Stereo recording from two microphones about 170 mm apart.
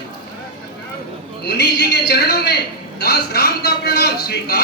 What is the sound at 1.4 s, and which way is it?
A woman's voice, 70° left (ahead or behind).